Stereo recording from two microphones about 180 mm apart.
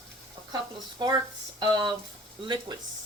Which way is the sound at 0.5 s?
25° right (ahead or behind).